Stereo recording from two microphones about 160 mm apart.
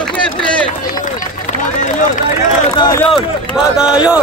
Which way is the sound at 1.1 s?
55° left (ahead or behind).